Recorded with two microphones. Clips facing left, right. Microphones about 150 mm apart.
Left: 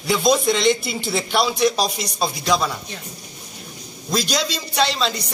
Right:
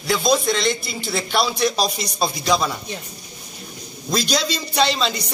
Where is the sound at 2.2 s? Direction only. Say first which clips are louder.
Even; 5° right (ahead or behind).